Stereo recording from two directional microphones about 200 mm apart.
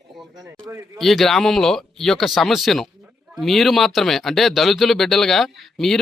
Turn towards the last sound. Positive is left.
turn(degrees=0)  # may be behind; listen again after turning